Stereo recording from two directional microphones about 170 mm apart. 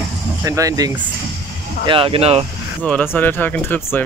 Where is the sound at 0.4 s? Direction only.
20° right (ahead or behind).